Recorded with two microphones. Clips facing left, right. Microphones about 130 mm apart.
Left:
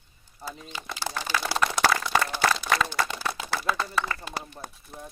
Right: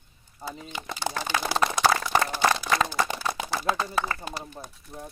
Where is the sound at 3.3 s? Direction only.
20° right (ahead or behind).